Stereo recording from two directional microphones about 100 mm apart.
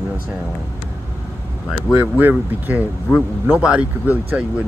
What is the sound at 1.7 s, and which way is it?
Speech, 10° right (ahead or behind).